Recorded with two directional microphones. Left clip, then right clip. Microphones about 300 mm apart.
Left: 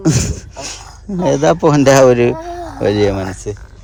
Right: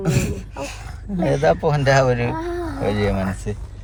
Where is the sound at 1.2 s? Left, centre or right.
Left.